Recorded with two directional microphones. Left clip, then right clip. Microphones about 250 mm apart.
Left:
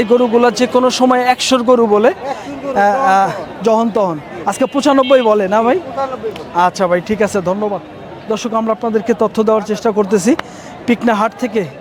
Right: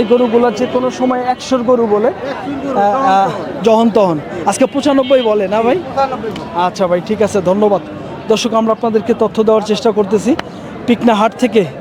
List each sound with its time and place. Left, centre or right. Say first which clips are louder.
0.0 s speech: even; left
0.8 s a man's voice: left 3 dB; left
2.7 s a man's voice: even; left; by 4.7 s centre
4.8 s a man's voice: left 4 dB; left
8.3 s speech: right 4 dB; centre; by 10.4 s left
10.8 s a man's voice: right 2 dB; centre